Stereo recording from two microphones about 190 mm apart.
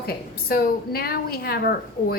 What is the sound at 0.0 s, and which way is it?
A woman's voice, 55° left (ahead or behind).